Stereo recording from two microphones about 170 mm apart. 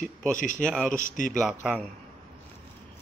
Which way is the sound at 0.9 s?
50° left (ahead or behind).